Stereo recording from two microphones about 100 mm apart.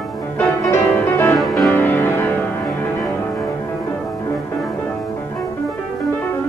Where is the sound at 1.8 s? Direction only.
20° left (ahead or behind).